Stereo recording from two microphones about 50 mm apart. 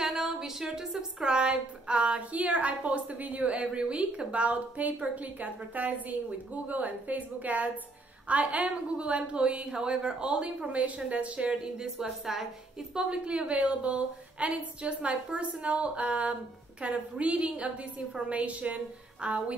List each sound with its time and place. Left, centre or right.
0.0 s a woman's voice: centre
12.9 s a woman's voice: centre